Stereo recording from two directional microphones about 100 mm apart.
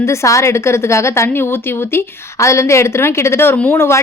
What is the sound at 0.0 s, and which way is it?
A woman's voice, 30° left (ahead or behind).